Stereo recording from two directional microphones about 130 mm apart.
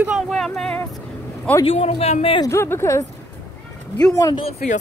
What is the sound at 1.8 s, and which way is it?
Speech, 55° left (ahead or behind).